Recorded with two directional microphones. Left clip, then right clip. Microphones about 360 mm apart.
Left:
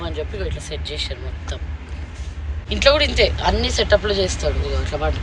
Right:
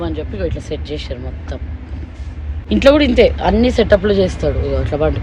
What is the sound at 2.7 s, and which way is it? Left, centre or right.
Speech, centre.